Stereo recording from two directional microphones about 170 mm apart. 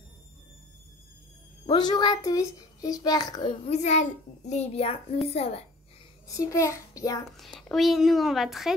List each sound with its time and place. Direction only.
1.7 s a child's voice: 25° left (ahead or behind)
3.6 s a child's voice: 40° left (ahead or behind)
6.2 s a child's voice: 20° left (ahead or behind)
7.6 s speech: centre (ahead or behind)